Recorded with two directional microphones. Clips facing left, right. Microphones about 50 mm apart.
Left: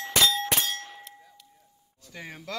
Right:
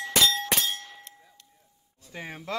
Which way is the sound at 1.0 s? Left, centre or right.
Centre.